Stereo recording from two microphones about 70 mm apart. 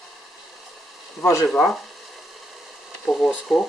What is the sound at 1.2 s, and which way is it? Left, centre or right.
Speech, left.